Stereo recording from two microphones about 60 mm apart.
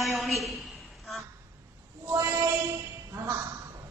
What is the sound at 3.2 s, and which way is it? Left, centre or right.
Speech, right.